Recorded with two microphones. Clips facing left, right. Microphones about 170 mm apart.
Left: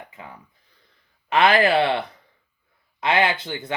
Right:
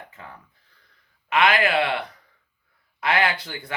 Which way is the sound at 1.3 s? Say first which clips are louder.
Left 3 dB; 30° left (ahead or behind).